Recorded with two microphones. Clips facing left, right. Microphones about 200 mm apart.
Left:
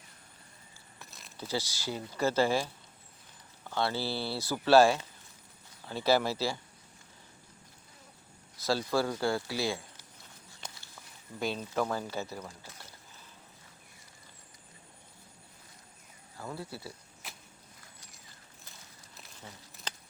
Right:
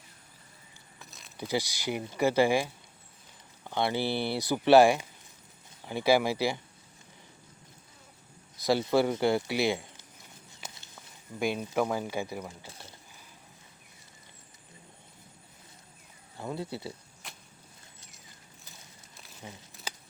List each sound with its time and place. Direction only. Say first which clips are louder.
0.9 s keys jangling: even; centre (ahead or behind)
1.4 s speech: right 4 dB; 15° right (ahead or behind)
8.5 s speech: right 4 dB; 15° right (ahead or behind)
10.6 s walk: right 1 dB; 5° right (ahead or behind)
11.3 s speech: right 3 dB; 15° right (ahead or behind)
16.4 s speech: right 5 dB; 20° right (ahead or behind)
17.2 s vehicle: even; centre (ahead or behind)